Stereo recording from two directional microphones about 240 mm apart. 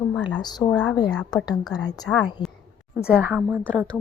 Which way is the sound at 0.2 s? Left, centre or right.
Centre.